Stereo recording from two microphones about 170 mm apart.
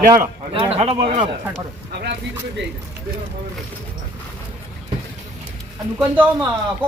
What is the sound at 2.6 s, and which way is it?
Speech, 90° right.